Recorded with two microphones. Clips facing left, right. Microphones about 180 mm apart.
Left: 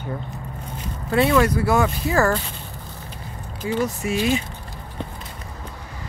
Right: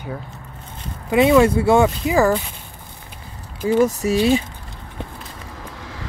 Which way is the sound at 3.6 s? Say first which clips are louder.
Right 7 dB; 40° right (ahead or behind).